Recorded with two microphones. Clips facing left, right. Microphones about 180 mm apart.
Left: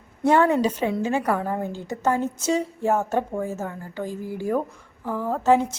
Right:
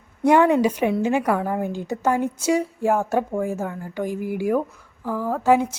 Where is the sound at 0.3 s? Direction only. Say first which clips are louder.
Right 2 dB; 15° right (ahead or behind).